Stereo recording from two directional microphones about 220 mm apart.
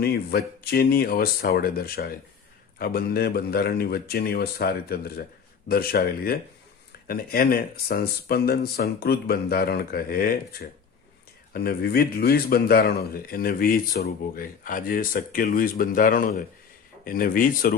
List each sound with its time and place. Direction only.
0.0 s a man's voice: 45° left (ahead or behind)